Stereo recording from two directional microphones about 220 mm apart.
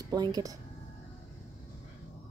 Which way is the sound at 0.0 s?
15° right (ahead or behind).